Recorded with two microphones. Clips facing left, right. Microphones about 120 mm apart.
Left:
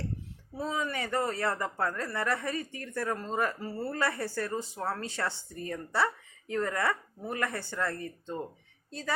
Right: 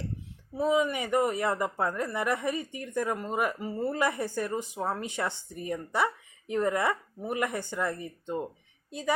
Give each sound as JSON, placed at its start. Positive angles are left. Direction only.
{"t": 0.5, "sound": "a woman's voice", "side_deg": -15}